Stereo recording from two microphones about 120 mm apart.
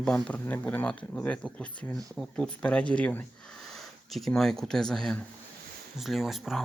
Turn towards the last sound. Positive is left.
turn(degrees=0)  # may be behind; listen again after turning